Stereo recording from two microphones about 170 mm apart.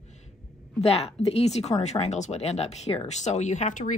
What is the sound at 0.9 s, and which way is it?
Speech, 35° left (ahead or behind).